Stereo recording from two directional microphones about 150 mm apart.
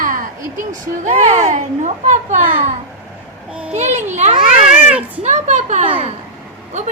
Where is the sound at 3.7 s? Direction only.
50° right (ahead or behind).